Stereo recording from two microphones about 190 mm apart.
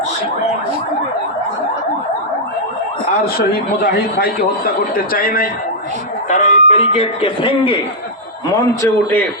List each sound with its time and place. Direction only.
3.8 s a man's voice: 50° left (ahead or behind); by 7.8 s 25° left (ahead or behind)
8.5 s a man's voice: 15° left (ahead or behind)